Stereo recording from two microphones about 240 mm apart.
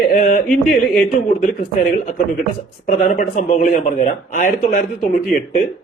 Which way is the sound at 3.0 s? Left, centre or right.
Left.